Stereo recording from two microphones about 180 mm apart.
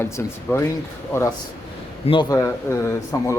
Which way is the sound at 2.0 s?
25° left (ahead or behind).